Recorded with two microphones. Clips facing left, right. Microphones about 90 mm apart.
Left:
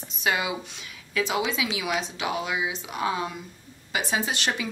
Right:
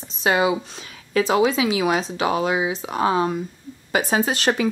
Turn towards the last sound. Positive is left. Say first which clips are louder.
# right 8 dB
turn(degrees=-45)  # may be behind; listen again after turning